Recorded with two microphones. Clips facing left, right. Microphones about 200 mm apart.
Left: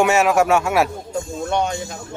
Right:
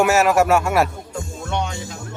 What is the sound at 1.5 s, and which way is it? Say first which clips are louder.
Music: left 4 dB; 45° left (ahead or behind).